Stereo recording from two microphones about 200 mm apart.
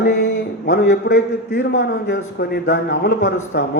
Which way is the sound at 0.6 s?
65° left (ahead or behind).